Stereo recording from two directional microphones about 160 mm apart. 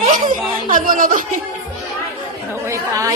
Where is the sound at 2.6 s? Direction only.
20° right (ahead or behind).